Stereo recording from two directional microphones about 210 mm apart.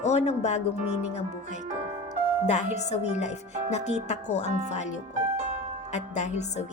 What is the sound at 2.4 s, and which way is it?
A woman's voice, 35° left (ahead or behind).